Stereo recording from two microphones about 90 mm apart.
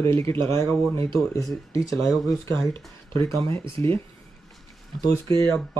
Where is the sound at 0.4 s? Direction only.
30° left (ahead or behind).